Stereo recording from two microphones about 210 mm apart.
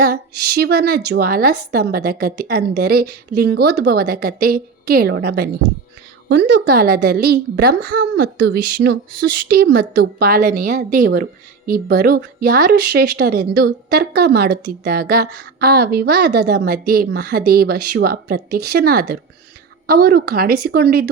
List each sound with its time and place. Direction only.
0.0 s a woman's voice: 50° right (ahead or behind)